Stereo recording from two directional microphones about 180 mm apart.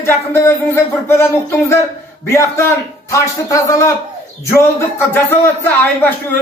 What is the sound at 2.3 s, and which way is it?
Speech, 15° left (ahead or behind).